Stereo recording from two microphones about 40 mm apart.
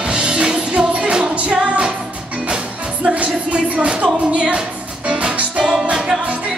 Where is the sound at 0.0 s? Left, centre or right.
Right.